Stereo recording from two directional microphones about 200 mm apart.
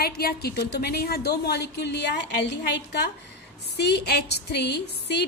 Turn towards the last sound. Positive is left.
turn(degrees=55)  # may be behind; listen again after turning